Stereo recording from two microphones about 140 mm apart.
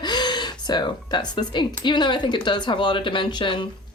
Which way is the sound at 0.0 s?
30° left (ahead or behind).